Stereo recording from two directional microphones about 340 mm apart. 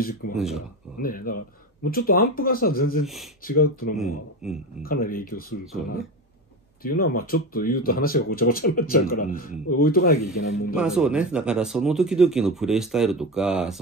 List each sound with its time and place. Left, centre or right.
0.4 s speech: centre
1.0 s speech: left
3.9 s speech: centre
4.8 s speech: left
6.8 s speech: left
10.8 s speech: centre